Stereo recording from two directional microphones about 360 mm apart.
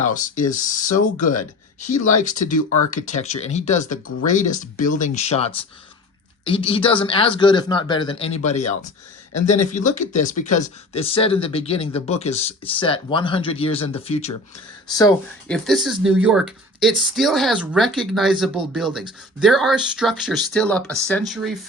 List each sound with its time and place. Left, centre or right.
0.0 s speech: left
1.4 s speech: left
2.9 s speech: centre
9.3 s speech: left
9.7 s speech: centre